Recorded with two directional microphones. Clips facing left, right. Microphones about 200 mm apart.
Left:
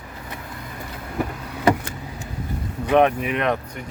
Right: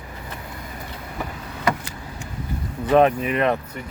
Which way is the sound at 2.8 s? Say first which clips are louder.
Right 1 dB; 15° left (ahead or behind).